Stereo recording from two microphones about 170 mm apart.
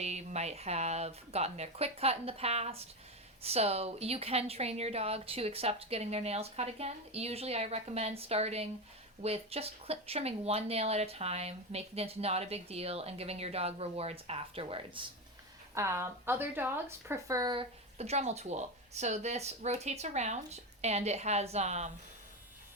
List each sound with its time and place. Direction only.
0.0 s speech: 40° right (ahead or behind)
15.7 s speech: 15° right (ahead or behind); by 21.9 s 40° right (ahead or behind)